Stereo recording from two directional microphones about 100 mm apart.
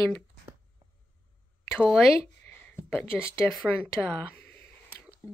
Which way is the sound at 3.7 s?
20° left (ahead or behind).